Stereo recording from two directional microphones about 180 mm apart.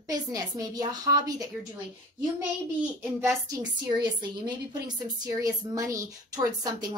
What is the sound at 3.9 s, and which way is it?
A woman's voice, 25° right (ahead or behind).